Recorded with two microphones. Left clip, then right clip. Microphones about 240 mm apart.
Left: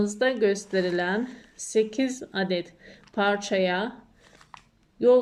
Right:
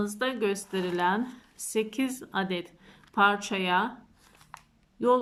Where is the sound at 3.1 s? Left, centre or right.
Right.